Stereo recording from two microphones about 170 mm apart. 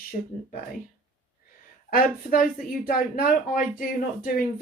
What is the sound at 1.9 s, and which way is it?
Speech, 60° left (ahead or behind).